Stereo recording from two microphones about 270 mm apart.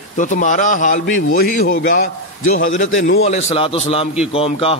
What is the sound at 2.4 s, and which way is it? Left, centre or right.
Speech, left.